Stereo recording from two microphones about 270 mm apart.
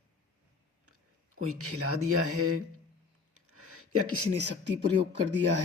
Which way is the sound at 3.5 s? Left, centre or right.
Right.